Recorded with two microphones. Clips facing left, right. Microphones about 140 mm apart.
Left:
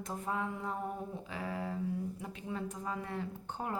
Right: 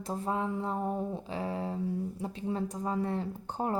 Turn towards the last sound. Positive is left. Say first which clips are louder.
# right 6 dB
turn(degrees=-35)  # may be behind; listen again after turning